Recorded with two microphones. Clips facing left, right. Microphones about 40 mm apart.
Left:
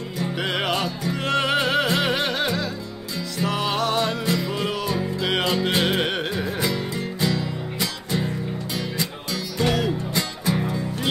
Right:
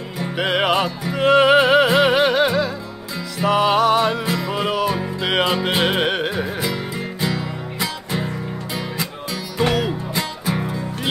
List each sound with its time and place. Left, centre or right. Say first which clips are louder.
0.2 s music: right 5 dB; centre